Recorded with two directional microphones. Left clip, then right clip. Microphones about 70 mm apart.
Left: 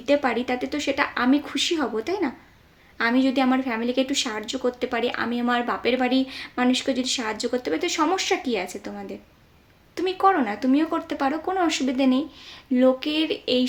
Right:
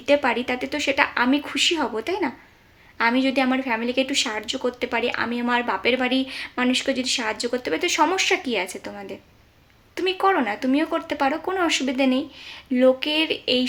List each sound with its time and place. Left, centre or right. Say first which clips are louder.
0.0 s speech: right 2 dB; centre